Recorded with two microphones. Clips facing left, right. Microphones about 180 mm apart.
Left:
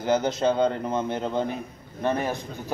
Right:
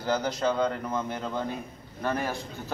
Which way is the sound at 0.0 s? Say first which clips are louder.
Left 4 dB; 20° left (ahead or behind).